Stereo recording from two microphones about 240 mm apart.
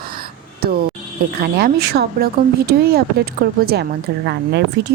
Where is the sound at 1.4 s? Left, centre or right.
Right.